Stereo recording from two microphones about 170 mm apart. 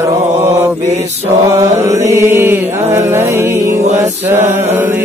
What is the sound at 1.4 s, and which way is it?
Mantra, 20° right (ahead or behind).